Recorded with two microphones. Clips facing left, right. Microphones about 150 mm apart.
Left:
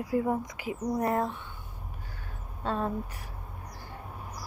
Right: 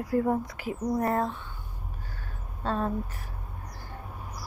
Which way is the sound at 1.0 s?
20° left (ahead or behind).